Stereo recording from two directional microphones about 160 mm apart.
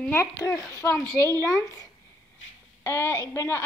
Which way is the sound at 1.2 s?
20° right (ahead or behind).